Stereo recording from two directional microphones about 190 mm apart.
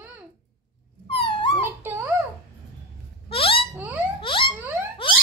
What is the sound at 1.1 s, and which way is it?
Dog, 25° left (ahead or behind).